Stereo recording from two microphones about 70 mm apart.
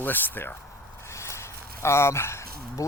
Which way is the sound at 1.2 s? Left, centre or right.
Left.